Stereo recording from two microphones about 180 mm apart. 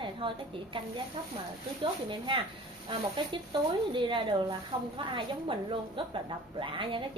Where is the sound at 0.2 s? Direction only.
30° right (ahead or behind).